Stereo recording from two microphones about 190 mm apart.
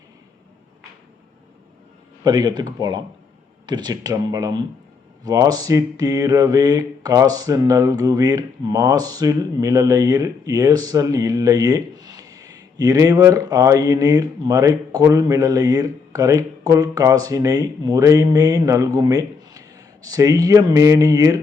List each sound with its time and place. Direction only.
2.2 s mantra: 20° right (ahead or behind)